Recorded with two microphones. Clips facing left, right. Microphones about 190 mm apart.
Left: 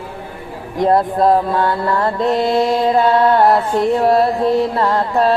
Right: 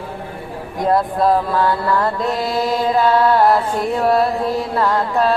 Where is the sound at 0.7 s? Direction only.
25° left (ahead or behind).